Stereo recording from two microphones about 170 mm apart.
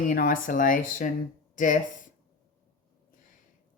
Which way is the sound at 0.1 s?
55° left (ahead or behind).